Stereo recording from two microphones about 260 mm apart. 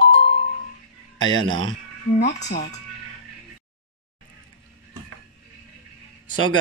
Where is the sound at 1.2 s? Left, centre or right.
Centre.